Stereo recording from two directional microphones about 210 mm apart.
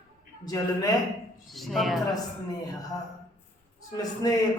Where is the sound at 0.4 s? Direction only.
15° left (ahead or behind).